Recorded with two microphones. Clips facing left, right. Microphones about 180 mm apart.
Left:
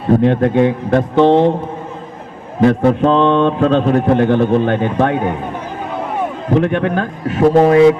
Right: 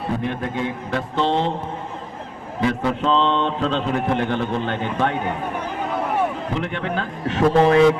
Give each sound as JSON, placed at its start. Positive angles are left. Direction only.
{"t": 0.2, "sound": "speech", "side_deg": 60}
{"t": 2.6, "sound": "a man's voice", "side_deg": 50}
{"t": 6.5, "sound": "speech", "side_deg": 55}
{"t": 7.3, "sound": "a man's voice", "side_deg": 45}